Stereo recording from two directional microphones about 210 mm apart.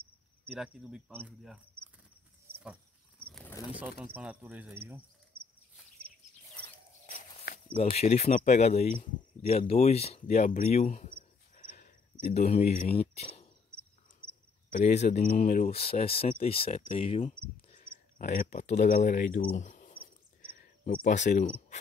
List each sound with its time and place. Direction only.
0.5 s speech: 5° right (ahead or behind)
2.5 s goat: 10° right (ahead or behind)
3.3 s a sound: 5° left (ahead or behind)
4.0 s speech: 5° right (ahead or behind)
7.1 s walk: 30° left (ahead or behind)
7.5 s speech: 30° left (ahead or behind)
14.7 s speech: 35° left (ahead or behind)
18.1 s speech: 40° left (ahead or behind)
20.5 s cricket: 45° left (ahead or behind)